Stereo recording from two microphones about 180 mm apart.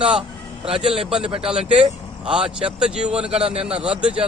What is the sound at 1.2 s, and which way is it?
Speech, 30° right (ahead or behind).